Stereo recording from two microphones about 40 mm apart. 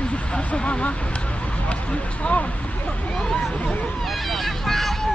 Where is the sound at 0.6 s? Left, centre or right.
Left.